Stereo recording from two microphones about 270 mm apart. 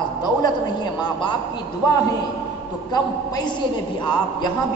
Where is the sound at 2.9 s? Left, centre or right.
Centre.